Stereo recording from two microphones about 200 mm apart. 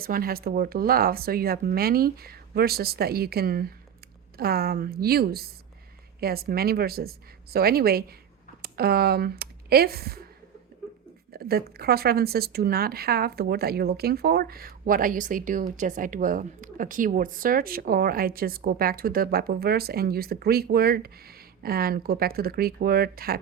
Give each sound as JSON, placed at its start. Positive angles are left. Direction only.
{"t": 0.0, "sound": "speech", "side_deg": -50}
{"t": 11.3, "sound": "speech", "side_deg": -50}